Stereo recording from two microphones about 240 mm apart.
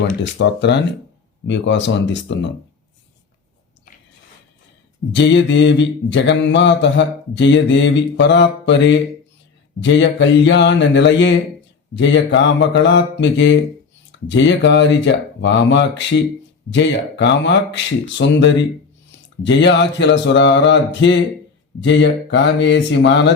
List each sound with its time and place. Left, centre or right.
0.2 s mantra: left
5.1 s mantra: left